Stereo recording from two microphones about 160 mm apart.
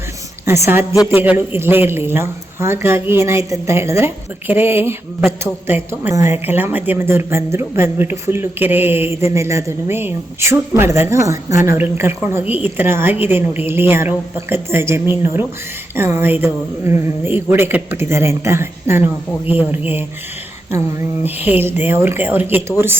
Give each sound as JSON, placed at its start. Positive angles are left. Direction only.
{"t": 0.4, "sound": "a woman's voice", "side_deg": -15}
{"t": 21.2, "sound": "a woman's voice", "side_deg": -10}